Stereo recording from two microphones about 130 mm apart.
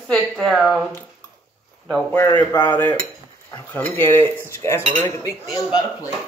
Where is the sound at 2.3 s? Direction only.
35° left (ahead or behind).